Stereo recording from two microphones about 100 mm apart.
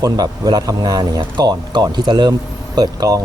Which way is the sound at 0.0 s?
40° right (ahead or behind).